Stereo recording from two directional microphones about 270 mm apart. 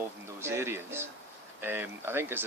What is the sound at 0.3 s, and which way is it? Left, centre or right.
Speech, centre.